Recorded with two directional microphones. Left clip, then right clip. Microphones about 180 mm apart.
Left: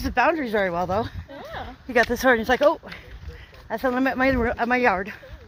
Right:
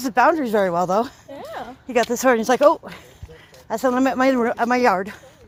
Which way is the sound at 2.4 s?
35° right (ahead or behind).